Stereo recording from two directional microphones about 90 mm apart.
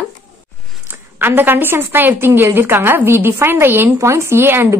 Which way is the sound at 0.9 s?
20° right (ahead or behind).